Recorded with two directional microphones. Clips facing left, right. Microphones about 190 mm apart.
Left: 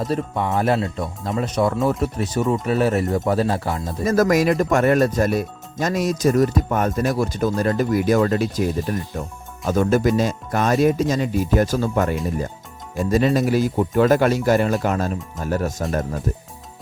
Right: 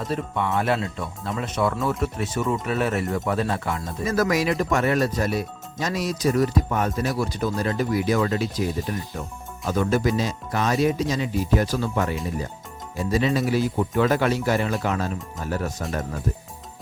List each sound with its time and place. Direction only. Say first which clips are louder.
0.0 s speech: left 3 dB; 40° left (ahead or behind)